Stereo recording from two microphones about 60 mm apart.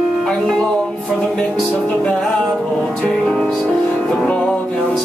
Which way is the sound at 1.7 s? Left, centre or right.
Centre.